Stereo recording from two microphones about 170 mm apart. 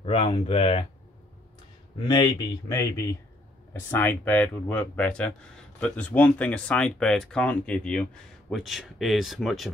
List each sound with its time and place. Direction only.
0.0 s speech: 30° left (ahead or behind)
2.0 s a man's voice: 25° left (ahead or behind); by 9.7 s centre (ahead or behind)